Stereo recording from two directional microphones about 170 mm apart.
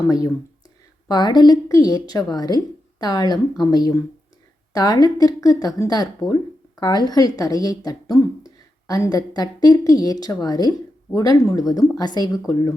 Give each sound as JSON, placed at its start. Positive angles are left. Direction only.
{"t": 0.0, "sound": "speech", "side_deg": 20}